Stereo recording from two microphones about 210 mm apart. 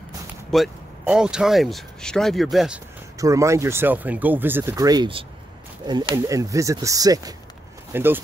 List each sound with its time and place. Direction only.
0.5 s speech: centre (ahead or behind)
3.2 s speech: 15° right (ahead or behind)